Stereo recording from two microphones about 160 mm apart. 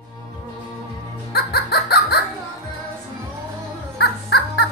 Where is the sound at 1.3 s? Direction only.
80° left.